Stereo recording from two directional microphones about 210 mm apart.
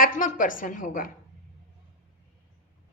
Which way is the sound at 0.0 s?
40° left (ahead or behind).